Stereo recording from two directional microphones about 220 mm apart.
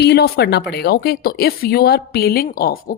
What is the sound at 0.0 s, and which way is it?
A woman's voice, 50° left (ahead or behind).